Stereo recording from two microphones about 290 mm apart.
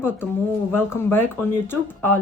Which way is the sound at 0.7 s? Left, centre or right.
Centre.